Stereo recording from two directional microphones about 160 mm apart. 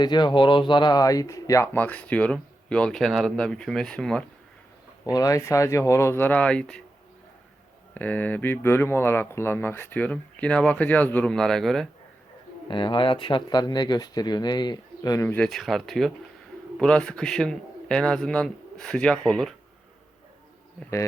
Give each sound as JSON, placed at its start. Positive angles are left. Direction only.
{"t": 0.0, "sound": "speech", "side_deg": 25}
{"t": 5.1, "sound": "speech", "side_deg": 20}
{"t": 7.9, "sound": "speech", "side_deg": 10}
{"t": 12.6, "sound": "speech", "side_deg": 30}
{"t": 15.4, "sound": "a man's voice", "side_deg": 0}